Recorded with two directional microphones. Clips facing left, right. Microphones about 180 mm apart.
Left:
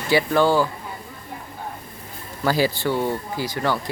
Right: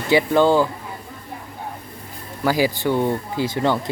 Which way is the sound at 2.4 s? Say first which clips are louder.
Right 1 dB; 15° right (ahead or behind).